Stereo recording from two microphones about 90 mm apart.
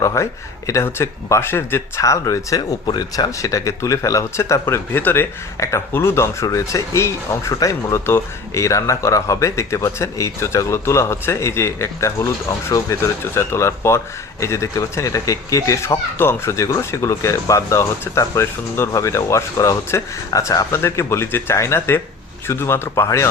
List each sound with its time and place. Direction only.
0.0 s speech: 35° left (ahead or behind)
2.8 s speech: 55° left (ahead or behind)
3.3 s speech: 35° left (ahead or behind)
20.7 s a man's voice: 30° left (ahead or behind)